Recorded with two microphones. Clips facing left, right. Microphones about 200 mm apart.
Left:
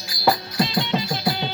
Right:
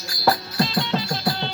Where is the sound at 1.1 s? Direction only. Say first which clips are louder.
Left 1 dB; 5° left (ahead or behind).